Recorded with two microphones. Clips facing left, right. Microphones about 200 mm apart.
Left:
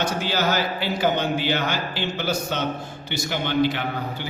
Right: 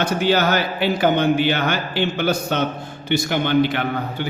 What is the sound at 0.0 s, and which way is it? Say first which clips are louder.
A man's voice: right 5 dB; 60° right (ahead or behind).